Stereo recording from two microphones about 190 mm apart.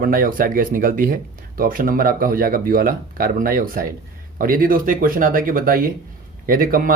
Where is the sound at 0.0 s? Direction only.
45° right (ahead or behind).